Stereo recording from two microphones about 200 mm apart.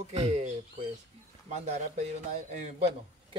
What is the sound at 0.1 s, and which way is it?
Speech, 35° right (ahead or behind).